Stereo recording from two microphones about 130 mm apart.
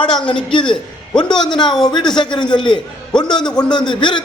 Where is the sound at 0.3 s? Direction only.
40° left (ahead or behind).